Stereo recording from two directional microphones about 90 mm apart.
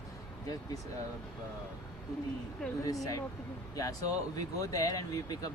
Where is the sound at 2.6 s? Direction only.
10° left (ahead or behind).